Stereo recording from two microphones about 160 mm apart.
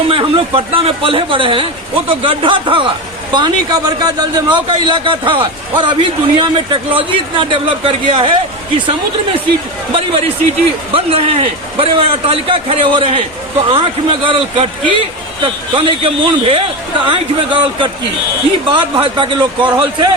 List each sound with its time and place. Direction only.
0.1 s a man's voice: 35° right (ahead or behind)
9.9 s a man's voice: 35° right (ahead or behind)